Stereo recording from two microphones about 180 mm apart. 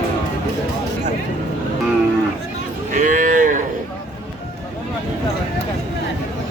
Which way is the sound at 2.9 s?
45° right (ahead or behind).